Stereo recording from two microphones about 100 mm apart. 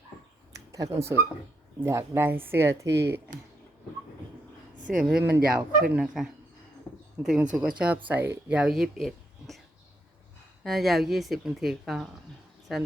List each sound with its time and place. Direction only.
0.5 s speech: 35° right (ahead or behind)
5.2 s speech: 15° right (ahead or behind)
7.2 s speech: 5° right (ahead or behind)
10.6 s speech: centre (ahead or behind)